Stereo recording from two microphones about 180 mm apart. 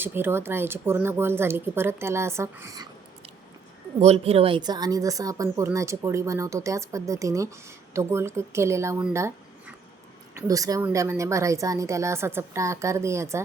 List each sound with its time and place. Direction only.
0.0 s speech: 10° right (ahead or behind)
4.0 s speech: 35° right (ahead or behind); by 9.0 s 15° right (ahead or behind)
9.1 s a sound: 15° right (ahead or behind)
10.3 s speech: 20° right (ahead or behind)